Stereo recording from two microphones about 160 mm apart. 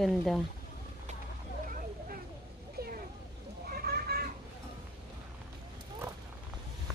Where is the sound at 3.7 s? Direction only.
70° right (ahead or behind).